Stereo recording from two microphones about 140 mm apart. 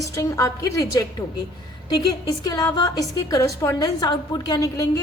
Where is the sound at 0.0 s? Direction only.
25° left (ahead or behind).